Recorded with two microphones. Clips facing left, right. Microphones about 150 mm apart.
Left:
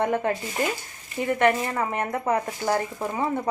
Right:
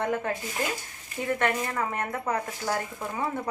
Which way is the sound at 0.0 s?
20° left (ahead or behind).